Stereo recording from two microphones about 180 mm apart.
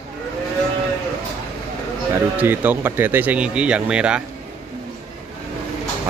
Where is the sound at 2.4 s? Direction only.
10° right (ahead or behind).